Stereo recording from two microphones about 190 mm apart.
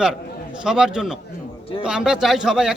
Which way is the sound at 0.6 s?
5° right (ahead or behind).